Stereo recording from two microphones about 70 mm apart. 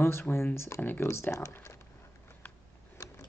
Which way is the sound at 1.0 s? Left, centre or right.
Left.